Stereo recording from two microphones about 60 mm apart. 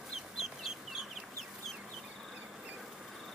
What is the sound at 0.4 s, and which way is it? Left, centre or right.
Chicken, centre.